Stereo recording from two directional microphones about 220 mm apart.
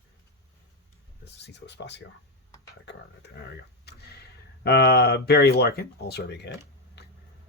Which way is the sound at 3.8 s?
45° left (ahead or behind).